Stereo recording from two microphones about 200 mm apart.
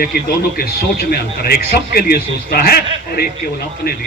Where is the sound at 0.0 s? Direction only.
50° left (ahead or behind).